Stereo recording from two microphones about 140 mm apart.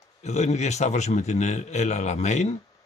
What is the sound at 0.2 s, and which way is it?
Speech, 55° left (ahead or behind).